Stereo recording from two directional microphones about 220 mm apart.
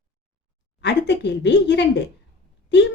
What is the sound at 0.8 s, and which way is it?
A woman's voice, 50° left (ahead or behind).